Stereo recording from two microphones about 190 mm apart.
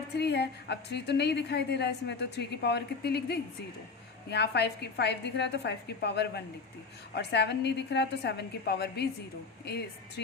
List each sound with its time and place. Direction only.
0.2 s a woman's voice: 60° left (ahead or behind)